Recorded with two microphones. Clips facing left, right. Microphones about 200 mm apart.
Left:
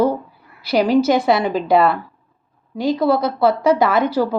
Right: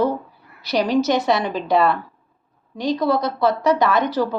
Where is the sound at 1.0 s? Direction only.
30° left (ahead or behind).